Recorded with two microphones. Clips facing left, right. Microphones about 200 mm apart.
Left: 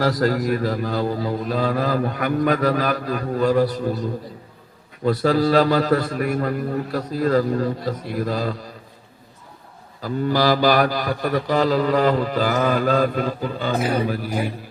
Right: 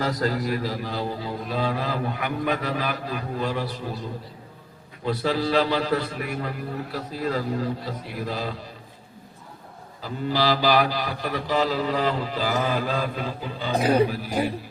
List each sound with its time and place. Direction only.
0.2 s mantra: 45° left (ahead or behind)
5.0 s mantra: 45° left (ahead or behind)
10.0 s mantra: 50° left (ahead or behind)